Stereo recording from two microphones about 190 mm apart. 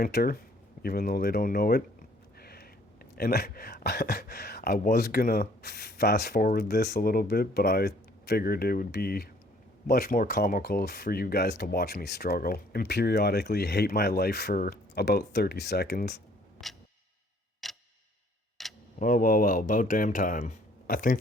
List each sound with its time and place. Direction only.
0.0 s speech: 50° left (ahead or behind)
2.4 s a sound: 55° left (ahead or behind)
3.2 s speech: 55° left (ahead or behind)
16.6 s music: centre (ahead or behind)
17.6 s tick-tock: centre (ahead or behind)
18.9 s speech: 45° left (ahead or behind)